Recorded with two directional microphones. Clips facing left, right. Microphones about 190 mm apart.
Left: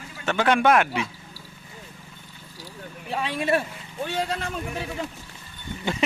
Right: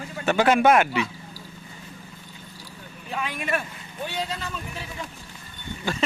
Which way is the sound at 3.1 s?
30° left (ahead or behind).